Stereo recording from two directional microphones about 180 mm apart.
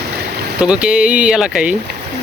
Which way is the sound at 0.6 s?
5° right (ahead or behind).